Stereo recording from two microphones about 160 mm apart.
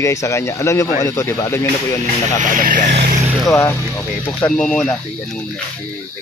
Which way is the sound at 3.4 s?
15° left (ahead or behind).